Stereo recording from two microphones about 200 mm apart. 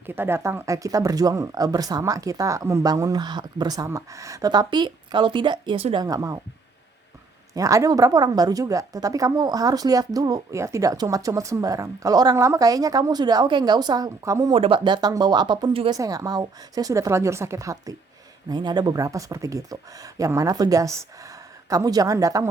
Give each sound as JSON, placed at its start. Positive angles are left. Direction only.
{"t": 0.0, "sound": "a woman's voice", "side_deg": -10}
{"t": 7.5, "sound": "a woman's voice", "side_deg": -15}